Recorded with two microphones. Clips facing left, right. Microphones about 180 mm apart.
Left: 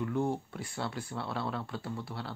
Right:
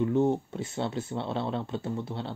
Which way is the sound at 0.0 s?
20° right (ahead or behind).